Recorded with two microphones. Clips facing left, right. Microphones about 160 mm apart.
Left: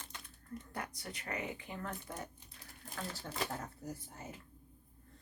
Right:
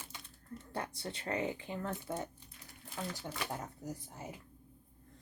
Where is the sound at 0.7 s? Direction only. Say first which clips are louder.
Right 6 dB; 30° right (ahead or behind).